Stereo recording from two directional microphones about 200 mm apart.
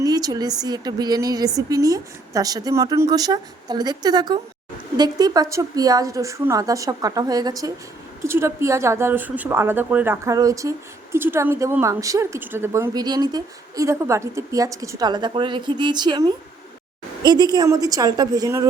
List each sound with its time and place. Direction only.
0.0 s a woman's voice: 20° right (ahead or behind)